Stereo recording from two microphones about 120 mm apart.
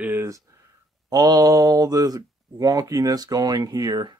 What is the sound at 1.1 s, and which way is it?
Speech, 30° right (ahead or behind).